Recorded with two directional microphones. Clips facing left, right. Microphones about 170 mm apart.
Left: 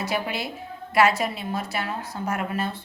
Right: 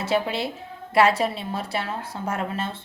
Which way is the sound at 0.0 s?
25° right (ahead or behind).